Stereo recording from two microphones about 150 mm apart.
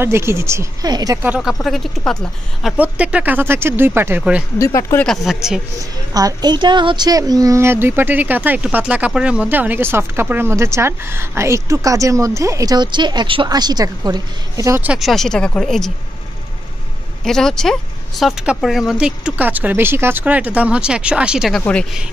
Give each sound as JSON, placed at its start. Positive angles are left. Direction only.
{"t": 0.0, "sound": "speech", "side_deg": -15}
{"t": 1.2, "sound": "speech", "side_deg": -5}
{"t": 4.6, "sound": "speech", "side_deg": 20}
{"t": 5.0, "sound": "speech", "side_deg": 0}
{"t": 6.1, "sound": "speech", "side_deg": -25}
{"t": 14.8, "sound": "speech", "side_deg": -5}
{"t": 17.2, "sound": "speech", "side_deg": 5}